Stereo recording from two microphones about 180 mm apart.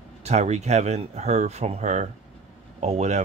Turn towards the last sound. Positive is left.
turn(degrees=-40)  # may be behind; listen again after turning